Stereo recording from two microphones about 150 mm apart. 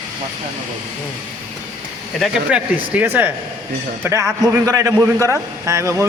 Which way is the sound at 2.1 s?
Centre (ahead or behind).